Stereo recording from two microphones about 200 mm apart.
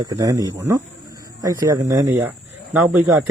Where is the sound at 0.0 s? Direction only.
15° right (ahead or behind).